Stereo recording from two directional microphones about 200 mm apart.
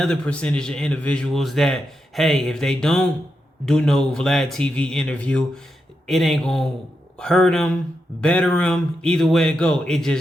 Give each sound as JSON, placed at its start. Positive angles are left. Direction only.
{"t": 0.0, "sound": "a man's voice", "side_deg": 5}